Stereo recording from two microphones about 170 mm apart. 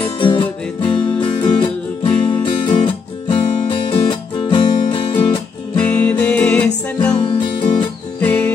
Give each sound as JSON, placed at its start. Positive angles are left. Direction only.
{"t": 0.2, "sound": "music", "side_deg": 30}
{"t": 2.1, "sound": "music", "side_deg": 10}
{"t": 2.4, "sound": "music", "side_deg": 30}
{"t": 5.8, "sound": "music", "side_deg": 10}
{"t": 8.2, "sound": "music", "side_deg": 10}